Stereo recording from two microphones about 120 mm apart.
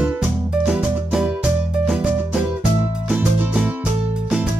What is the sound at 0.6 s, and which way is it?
Music, 5° right (ahead or behind).